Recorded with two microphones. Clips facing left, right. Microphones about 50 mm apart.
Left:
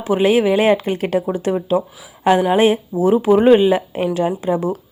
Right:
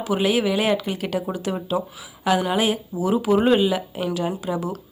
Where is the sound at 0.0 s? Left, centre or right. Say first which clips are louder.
Left 6 dB; left.